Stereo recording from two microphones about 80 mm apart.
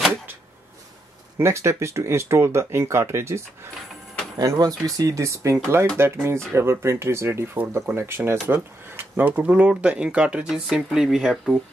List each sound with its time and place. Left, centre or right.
1.4 s speech: right
4.4 s speech: right; by 11.5 s centre